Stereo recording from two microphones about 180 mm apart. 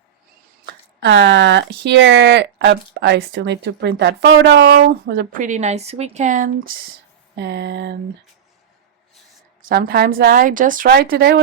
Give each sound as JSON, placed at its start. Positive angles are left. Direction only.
{"t": 0.6, "sound": "a woman's voice", "side_deg": -85}
{"t": 7.3, "sound": "speech", "side_deg": -70}
{"t": 9.6, "sound": "speech", "side_deg": -60}